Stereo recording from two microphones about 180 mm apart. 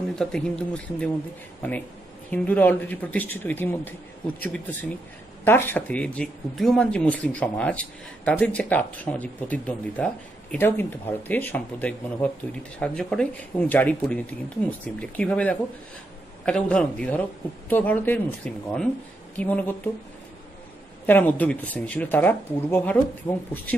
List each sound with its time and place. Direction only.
0.1 s speech: 5° left (ahead or behind)
5.4 s speech: 10° left (ahead or behind)
21.0 s speech: 10° left (ahead or behind)